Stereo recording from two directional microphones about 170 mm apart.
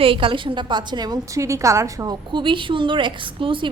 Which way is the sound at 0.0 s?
30° right (ahead or behind).